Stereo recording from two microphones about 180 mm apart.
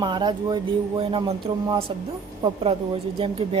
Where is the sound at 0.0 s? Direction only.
25° right (ahead or behind).